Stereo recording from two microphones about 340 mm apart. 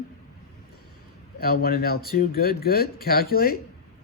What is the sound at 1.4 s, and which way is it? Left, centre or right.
Speech, left.